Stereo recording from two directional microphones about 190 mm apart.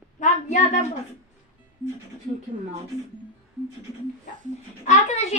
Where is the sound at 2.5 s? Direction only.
40° right (ahead or behind).